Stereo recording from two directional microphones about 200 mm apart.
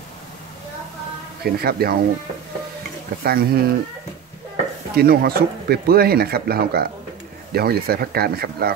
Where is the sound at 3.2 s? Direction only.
50° right (ahead or behind).